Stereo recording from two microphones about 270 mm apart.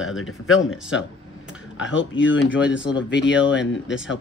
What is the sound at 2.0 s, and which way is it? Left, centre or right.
Speech, left.